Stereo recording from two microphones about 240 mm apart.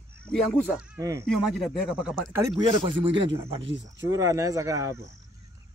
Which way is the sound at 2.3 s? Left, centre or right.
Centre.